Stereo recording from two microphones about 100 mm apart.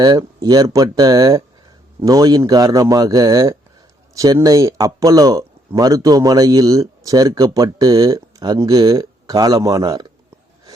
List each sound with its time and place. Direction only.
0.0 s speech: 40° right (ahead or behind)